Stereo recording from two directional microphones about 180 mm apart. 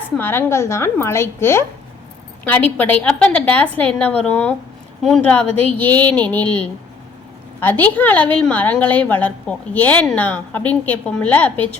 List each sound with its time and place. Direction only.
0.2 s a woman's voice: 10° left (ahead or behind)